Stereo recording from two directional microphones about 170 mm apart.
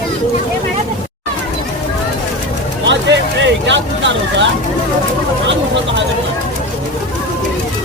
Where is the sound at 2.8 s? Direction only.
90° right.